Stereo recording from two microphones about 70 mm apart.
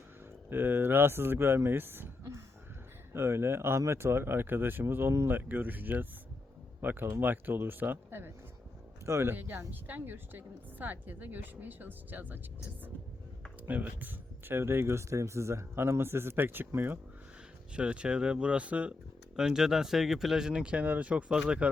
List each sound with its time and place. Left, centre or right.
0.5 s speech: right
3.1 s speech: right
5.5 s a woman's voice: right
9.0 s speech: right
9.3 s a woman's voice: right
13.7 s speech: right
17.7 s speech: centre
19.4 s speech: centre